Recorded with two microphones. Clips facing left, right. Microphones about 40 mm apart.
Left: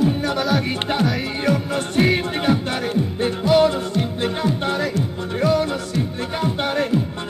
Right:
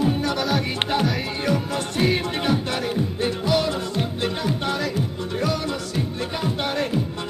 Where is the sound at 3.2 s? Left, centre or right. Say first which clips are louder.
Left 7 dB; left.